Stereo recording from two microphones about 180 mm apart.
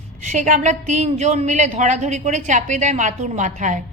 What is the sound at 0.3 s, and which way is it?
A woman's voice, 45° right (ahead or behind).